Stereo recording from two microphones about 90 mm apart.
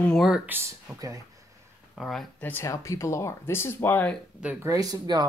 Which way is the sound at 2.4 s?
20° left (ahead or behind).